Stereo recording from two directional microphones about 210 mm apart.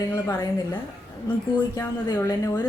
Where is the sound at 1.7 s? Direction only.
15° left (ahead or behind).